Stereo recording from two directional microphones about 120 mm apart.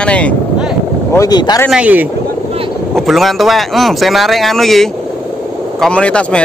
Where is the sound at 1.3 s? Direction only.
35° left (ahead or behind).